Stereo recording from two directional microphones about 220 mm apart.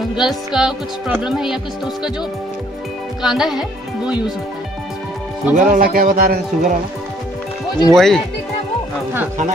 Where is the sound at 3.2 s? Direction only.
Centre (ahead or behind).